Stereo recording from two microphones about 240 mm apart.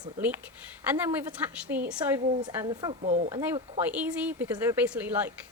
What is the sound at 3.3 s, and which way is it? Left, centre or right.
Speech, centre.